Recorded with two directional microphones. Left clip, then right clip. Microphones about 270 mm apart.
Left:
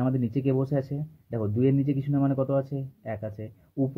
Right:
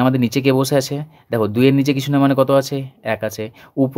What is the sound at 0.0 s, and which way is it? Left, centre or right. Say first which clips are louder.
Speech: right 12 dB; right.